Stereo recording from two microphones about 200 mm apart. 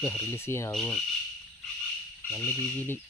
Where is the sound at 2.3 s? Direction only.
10° left (ahead or behind).